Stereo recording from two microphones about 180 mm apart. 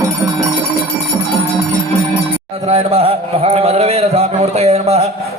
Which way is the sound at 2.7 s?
35° right (ahead or behind).